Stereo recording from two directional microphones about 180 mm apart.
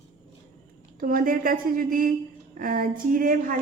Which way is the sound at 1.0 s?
50° right (ahead or behind).